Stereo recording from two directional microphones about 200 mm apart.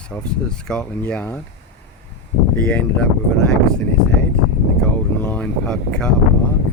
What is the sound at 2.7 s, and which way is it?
Speech, 5° left (ahead or behind).